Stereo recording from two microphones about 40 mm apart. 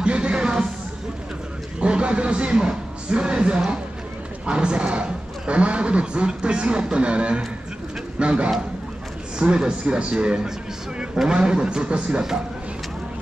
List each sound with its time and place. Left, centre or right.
0.0 s music: right
1.8 s a man's voice: right